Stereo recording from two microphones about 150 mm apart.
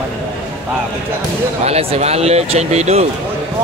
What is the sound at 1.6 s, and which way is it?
Speech, 45° right (ahead or behind).